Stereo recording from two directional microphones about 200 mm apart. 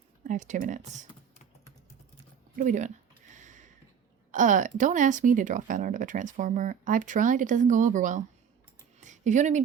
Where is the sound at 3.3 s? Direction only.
40° right (ahead or behind).